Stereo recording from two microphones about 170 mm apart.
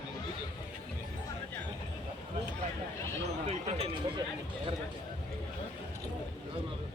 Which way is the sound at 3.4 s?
40° right (ahead or behind).